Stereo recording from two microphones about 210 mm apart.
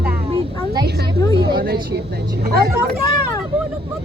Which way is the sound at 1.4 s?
50° right (ahead or behind).